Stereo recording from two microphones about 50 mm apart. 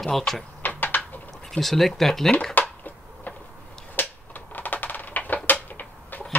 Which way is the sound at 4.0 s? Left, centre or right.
Left.